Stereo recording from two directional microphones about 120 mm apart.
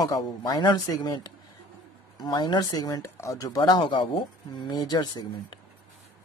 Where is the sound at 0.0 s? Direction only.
35° left (ahead or behind).